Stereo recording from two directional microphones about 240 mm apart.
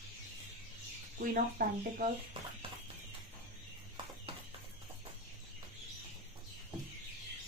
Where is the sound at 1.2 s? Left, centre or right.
Right.